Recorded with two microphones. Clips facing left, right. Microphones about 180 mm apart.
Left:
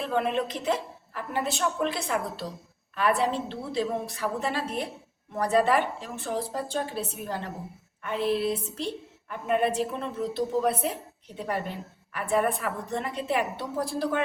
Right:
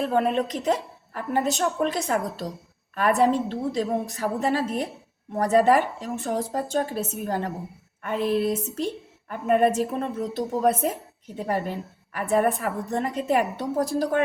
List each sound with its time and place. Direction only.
0.0 s a woman's voice: 45° right (ahead or behind)
12.1 s a woman's voice: 40° right (ahead or behind)